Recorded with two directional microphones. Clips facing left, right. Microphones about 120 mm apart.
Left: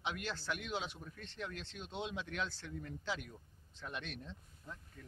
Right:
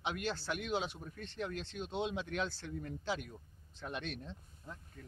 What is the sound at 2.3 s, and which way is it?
Speech, 35° right (ahead or behind).